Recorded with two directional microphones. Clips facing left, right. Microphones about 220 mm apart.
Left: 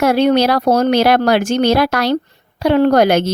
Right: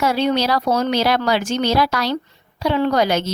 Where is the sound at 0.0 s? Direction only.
55° left (ahead or behind).